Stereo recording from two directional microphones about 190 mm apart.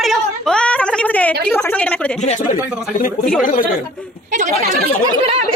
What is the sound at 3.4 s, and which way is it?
Speech, 45° left (ahead or behind).